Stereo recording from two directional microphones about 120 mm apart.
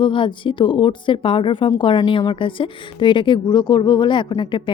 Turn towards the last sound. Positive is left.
turn(degrees=40)  # may be behind; listen again after turning